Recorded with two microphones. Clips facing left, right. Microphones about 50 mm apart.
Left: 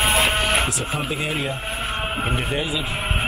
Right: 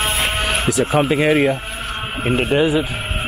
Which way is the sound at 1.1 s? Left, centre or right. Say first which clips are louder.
Right 10 dB; right.